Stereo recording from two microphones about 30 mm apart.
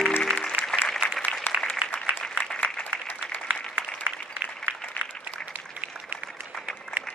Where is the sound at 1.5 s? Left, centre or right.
Left.